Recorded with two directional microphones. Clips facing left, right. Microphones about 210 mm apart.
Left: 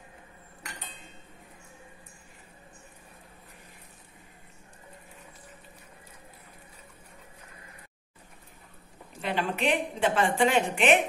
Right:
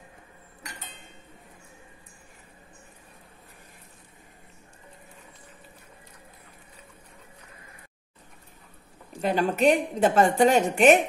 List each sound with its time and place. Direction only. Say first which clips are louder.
9.2 s a woman's voice: right 7 dB; 40° right (ahead or behind)